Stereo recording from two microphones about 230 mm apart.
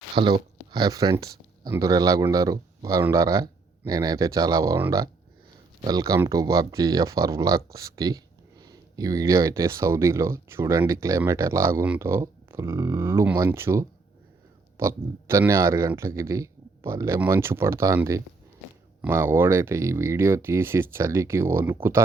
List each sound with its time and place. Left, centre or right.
0.1 s speech: right